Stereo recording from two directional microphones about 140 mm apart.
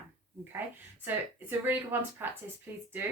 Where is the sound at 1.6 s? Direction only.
15° right (ahead or behind).